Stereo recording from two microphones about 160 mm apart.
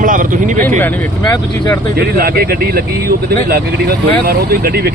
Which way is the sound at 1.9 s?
70° right (ahead or behind).